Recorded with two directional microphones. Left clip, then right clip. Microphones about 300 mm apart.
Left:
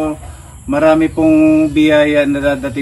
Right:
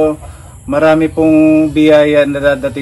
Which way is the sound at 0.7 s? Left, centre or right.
Centre.